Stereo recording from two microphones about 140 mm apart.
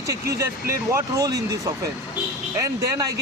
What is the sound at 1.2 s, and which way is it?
Speech, 25° right (ahead or behind).